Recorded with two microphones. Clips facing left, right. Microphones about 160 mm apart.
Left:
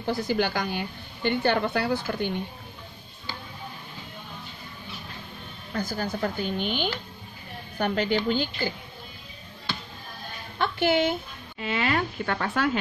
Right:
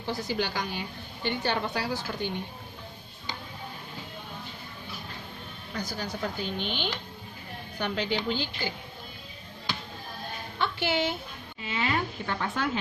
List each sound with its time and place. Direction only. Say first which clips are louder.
0.0 s a woman's voice: left 5 dB; 50° left (ahead or behind)
5.7 s speech: left 5 dB; 50° left (ahead or behind)
10.6 s a woman's voice: left 5 dB; 50° left (ahead or behind)
11.6 s a woman's voice: left 4 dB; 65° left (ahead or behind)